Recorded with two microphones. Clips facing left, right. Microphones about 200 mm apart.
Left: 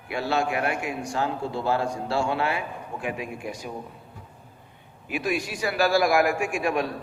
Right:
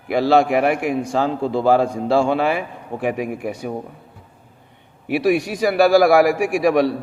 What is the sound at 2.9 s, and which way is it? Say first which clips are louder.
Speech: right 10 dB; 65° right (ahead or behind).